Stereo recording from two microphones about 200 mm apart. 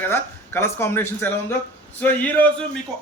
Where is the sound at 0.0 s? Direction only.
10° left (ahead or behind).